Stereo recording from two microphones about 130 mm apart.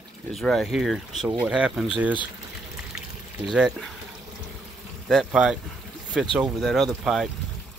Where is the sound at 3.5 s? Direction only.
5° right (ahead or behind).